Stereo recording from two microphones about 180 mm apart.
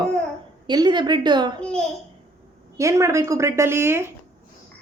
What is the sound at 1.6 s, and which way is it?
Speech, 5° left (ahead or behind).